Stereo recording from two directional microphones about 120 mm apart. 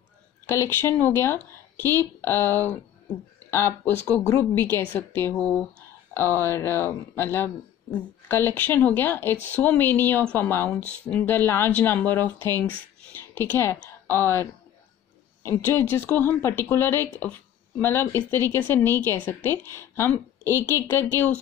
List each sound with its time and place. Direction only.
0.5 s a woman's voice: 20° left (ahead or behind)